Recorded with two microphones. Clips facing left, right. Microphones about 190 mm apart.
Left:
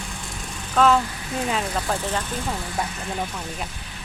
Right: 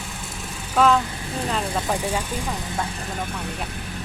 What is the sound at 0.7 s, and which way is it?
Speech, centre (ahead or behind).